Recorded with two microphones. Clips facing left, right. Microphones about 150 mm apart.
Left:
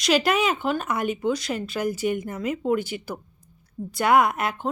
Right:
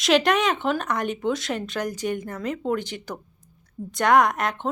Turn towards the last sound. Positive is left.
turn(degrees=5)  # may be behind; listen again after turning